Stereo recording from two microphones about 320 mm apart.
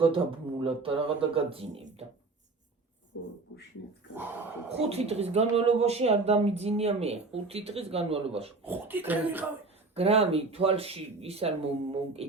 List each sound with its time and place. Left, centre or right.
0.0 s speech: centre
3.1 s beatboxing: left
4.9 s speech: centre
8.6 s speech: centre
9.9 s speech: centre